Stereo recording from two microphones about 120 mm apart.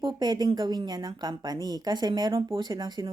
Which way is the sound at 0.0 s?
35° right (ahead or behind).